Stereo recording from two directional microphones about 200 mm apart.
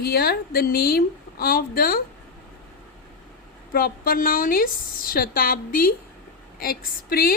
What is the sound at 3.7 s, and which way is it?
A woman's voice, 45° left (ahead or behind).